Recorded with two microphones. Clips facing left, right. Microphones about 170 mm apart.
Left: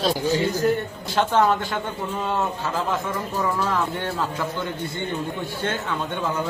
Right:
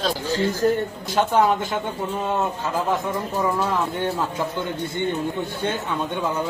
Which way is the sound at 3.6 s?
15° right (ahead or behind).